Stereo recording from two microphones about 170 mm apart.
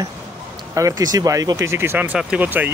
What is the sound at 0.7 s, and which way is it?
Speech, 20° right (ahead or behind).